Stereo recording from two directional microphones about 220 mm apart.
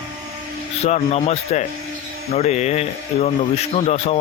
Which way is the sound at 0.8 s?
30° left (ahead or behind).